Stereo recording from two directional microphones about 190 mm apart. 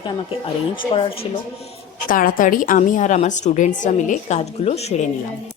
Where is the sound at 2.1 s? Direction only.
45° left (ahead or behind).